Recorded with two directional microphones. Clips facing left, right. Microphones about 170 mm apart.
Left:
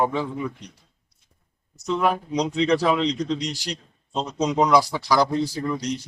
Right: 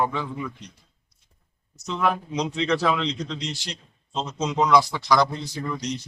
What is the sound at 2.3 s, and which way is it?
Speech, 40° left (ahead or behind).